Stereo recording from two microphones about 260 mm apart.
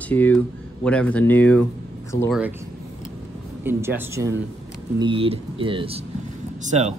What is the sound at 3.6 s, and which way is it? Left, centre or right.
Speech, centre.